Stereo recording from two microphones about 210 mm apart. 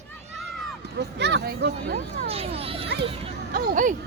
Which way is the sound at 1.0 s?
55° right (ahead or behind).